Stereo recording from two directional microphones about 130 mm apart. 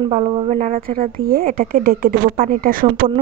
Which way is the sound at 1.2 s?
90° right.